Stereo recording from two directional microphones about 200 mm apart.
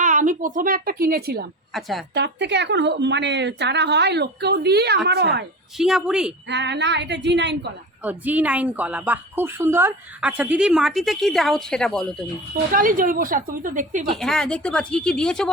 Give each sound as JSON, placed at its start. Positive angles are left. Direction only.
{"t": 0.0, "sound": "a woman's voice", "side_deg": -40}
{"t": 1.7, "sound": "speech", "side_deg": 0}
{"t": 2.1, "sound": "a woman's voice", "side_deg": -60}
{"t": 5.7, "sound": "speech", "side_deg": 0}
{"t": 6.5, "sound": "a woman's voice", "side_deg": -60}
{"t": 8.0, "sound": "a woman's voice", "side_deg": -10}
{"t": 12.7, "sound": "a woman's voice", "side_deg": -45}
{"t": 14.2, "sound": "speech", "side_deg": 5}